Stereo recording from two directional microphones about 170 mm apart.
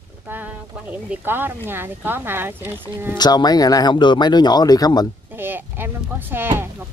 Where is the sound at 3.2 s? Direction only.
25° left (ahead or behind).